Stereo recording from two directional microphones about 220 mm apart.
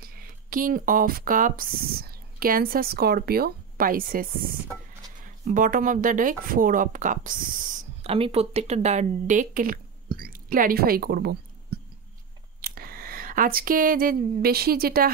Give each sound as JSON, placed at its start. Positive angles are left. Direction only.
{"t": 0.0, "sound": "speech", "side_deg": -40}
{"t": 8.1, "sound": "speech", "side_deg": -25}
{"t": 12.6, "sound": "speech", "side_deg": -40}